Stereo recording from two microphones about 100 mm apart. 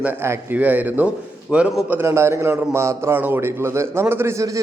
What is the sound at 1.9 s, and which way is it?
A man's voice, 25° right (ahead or behind).